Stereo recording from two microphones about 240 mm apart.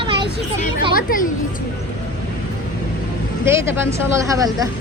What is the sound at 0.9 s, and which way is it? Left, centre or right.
Speech, left.